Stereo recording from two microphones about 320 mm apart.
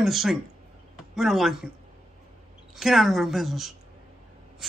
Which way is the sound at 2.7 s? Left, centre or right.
Centre.